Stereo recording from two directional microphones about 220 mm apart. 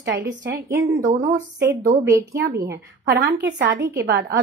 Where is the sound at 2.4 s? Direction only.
45° right (ahead or behind).